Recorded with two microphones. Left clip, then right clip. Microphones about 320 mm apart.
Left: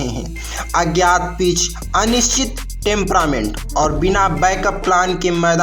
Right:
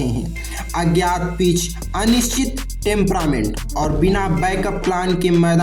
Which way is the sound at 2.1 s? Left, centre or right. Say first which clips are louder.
Left 3 dB; right.